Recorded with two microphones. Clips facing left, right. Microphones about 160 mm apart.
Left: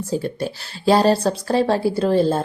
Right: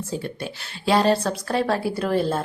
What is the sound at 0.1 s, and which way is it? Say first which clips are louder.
Speech: left 9 dB; 35° left (ahead or behind).